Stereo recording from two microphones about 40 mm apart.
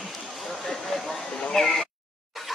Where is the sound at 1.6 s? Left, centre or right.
Centre.